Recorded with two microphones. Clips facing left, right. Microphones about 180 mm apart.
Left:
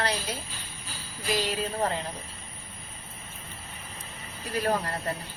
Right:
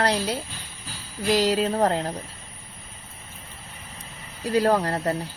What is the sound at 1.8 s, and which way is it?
Speech, 65° right (ahead or behind).